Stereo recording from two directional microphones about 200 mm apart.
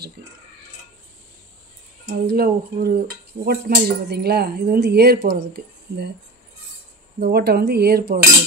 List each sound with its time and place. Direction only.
0.2 s a sound: 50° right (ahead or behind)
2.0 s speech: 50° right (ahead or behind)
7.2 s speech: 50° right (ahead or behind)